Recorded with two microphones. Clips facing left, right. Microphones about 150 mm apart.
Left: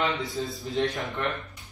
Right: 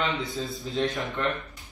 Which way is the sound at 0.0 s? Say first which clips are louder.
Left 1 dB; centre (ahead or behind).